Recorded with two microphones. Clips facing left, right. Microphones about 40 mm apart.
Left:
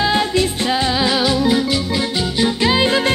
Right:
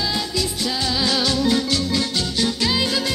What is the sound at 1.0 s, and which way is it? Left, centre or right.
Music, centre.